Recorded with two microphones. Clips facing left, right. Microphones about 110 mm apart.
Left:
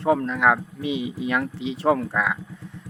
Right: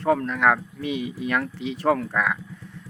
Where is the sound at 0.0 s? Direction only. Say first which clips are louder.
Left 1 dB; 20° left (ahead or behind).